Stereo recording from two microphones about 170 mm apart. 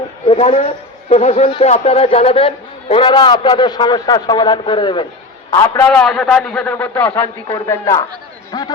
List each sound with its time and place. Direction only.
0.3 s a man's voice: 35° left (ahead or behind)
5.5 s a man's voice: 15° left (ahead or behind)
5.9 s a man's voice: centre (ahead or behind); by 8.7 s 25° left (ahead or behind)